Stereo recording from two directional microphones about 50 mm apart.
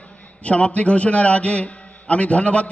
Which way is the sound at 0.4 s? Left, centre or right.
Left.